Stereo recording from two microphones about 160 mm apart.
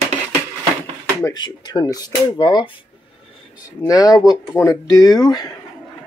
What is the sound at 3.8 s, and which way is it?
Speech, 20° left (ahead or behind).